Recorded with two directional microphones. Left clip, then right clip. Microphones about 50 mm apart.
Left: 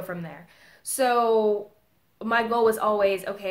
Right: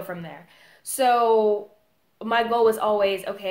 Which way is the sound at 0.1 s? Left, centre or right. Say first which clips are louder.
Right 1 dB; centre.